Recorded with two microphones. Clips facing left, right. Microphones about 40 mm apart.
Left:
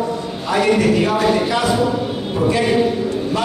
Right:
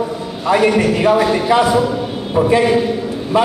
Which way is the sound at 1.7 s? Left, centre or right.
Centre.